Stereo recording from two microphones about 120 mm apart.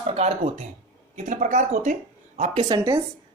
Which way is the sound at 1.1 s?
90° right.